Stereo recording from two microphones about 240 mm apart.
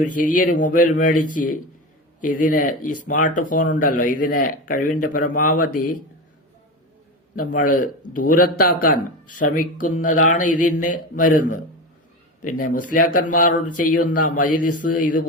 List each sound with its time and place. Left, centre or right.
0.2 s speech: left
7.3 s speech: left